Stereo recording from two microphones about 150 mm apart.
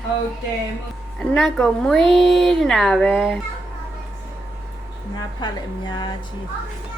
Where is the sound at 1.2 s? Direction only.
5° left (ahead or behind).